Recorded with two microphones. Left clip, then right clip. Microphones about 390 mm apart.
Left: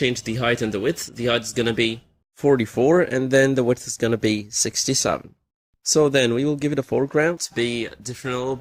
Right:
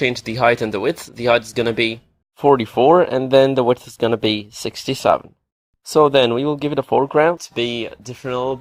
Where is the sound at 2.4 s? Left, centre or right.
Right.